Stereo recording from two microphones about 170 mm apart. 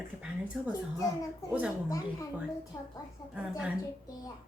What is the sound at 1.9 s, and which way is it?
Speech, 20° left (ahead or behind).